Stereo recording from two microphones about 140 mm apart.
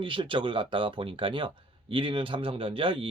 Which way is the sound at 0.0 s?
35° right (ahead or behind).